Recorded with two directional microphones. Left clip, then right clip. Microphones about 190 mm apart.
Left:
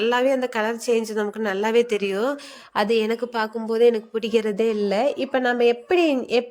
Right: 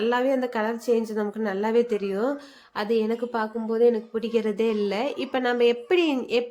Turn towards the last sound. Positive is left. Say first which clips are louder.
# left 3 dB
turn(degrees=20)  # may be behind; listen again after turning